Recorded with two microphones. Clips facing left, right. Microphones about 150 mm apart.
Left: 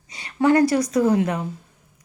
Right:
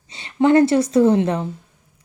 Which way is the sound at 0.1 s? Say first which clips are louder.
Right 3 dB; 25° right (ahead or behind).